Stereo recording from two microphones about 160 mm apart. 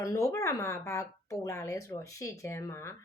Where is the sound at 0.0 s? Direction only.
20° left (ahead or behind).